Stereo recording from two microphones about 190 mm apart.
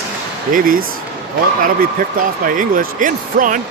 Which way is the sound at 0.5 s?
45° right (ahead or behind).